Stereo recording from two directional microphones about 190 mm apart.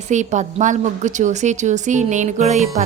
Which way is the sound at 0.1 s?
40° right (ahead or behind).